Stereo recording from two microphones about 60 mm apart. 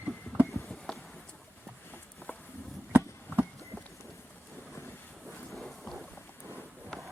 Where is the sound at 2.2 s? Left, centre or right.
Left.